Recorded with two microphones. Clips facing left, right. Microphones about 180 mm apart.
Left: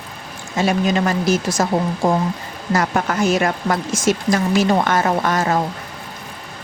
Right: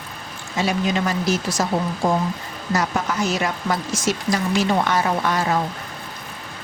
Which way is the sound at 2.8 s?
55° left (ahead or behind).